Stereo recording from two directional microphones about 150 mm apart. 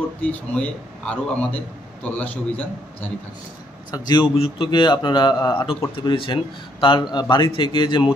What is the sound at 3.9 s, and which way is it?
A man's voice, 30° left (ahead or behind).